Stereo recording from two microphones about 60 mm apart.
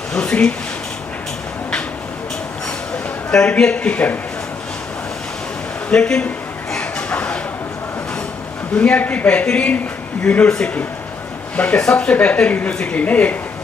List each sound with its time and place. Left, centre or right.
0.1 s speech: centre
3.3 s a woman's voice: centre
5.9 s a sound: centre
8.7 s a woman's voice: left
11.5 s a woman's voice: centre